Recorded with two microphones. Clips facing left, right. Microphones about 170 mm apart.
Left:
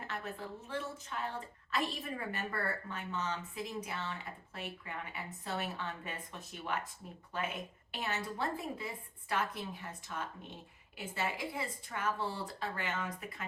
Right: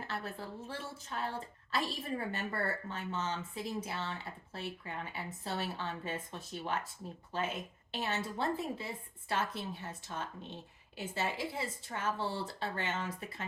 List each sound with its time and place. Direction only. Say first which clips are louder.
0.1 s a woman's voice: even; 35° right (ahead or behind)